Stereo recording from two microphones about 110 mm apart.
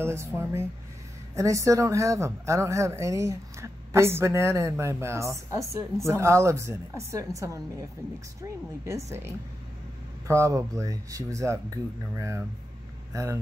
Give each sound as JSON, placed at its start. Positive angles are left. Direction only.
{"t": 0.0, "sound": "speech", "side_deg": -25}